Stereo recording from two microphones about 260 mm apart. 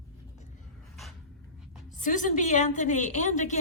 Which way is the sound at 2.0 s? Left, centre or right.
Left.